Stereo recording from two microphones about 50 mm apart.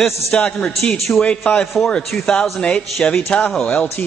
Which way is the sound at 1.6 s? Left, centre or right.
Centre.